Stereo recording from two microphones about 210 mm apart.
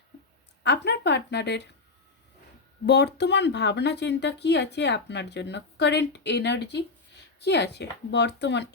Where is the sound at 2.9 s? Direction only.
50° left (ahead or behind).